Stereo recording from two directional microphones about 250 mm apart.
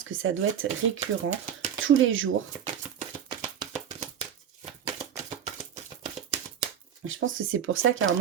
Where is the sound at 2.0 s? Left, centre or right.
Right.